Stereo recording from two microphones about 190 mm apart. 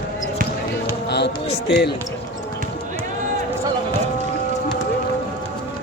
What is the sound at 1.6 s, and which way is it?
Speech, 65° left (ahead or behind).